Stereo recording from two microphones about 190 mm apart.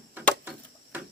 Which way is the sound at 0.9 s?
10° right (ahead or behind).